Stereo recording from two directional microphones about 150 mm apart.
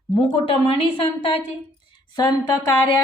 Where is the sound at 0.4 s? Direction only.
40° left (ahead or behind).